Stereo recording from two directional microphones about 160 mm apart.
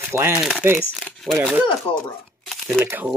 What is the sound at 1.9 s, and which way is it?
Shuffling cards, centre (ahead or behind).